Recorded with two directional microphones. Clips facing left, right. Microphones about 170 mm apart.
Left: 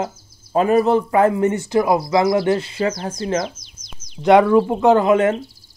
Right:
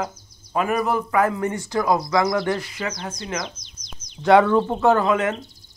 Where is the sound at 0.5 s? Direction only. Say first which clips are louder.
Left 7 dB; 30° left (ahead or behind).